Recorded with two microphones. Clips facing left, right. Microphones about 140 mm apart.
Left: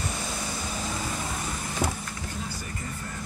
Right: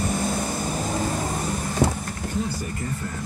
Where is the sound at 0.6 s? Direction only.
40° right (ahead or behind).